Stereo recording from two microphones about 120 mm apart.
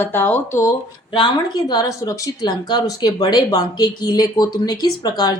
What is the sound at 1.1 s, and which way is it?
Speech, 40° left (ahead or behind).